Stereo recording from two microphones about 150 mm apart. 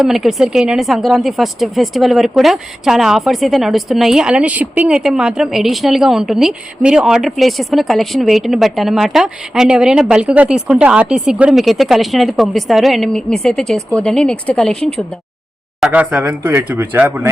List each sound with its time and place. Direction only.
0.0 s speech: centre (ahead or behind)
15.8 s speech: 10° right (ahead or behind)